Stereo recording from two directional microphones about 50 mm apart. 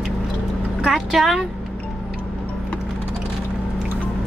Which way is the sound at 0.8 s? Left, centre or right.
Centre.